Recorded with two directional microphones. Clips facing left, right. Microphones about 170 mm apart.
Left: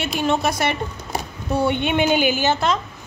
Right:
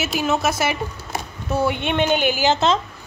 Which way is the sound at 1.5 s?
5° right (ahead or behind).